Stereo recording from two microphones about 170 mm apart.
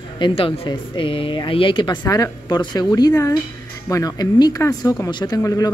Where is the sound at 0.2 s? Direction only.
30° left (ahead or behind).